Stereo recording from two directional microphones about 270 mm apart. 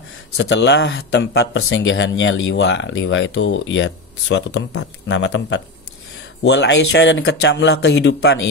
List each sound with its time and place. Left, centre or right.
0.4 s speech: left